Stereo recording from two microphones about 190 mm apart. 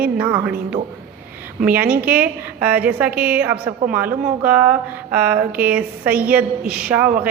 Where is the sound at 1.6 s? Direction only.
10° right (ahead or behind).